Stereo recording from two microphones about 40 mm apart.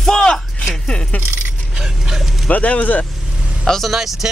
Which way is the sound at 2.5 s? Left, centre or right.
Left.